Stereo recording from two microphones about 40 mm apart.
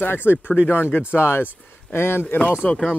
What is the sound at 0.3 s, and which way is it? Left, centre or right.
Speech, left.